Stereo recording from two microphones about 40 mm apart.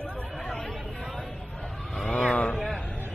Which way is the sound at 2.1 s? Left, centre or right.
Left.